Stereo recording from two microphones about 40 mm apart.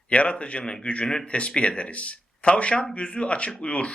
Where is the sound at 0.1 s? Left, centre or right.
Left.